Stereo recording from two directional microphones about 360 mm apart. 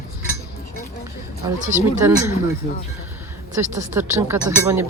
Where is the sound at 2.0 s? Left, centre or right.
Centre.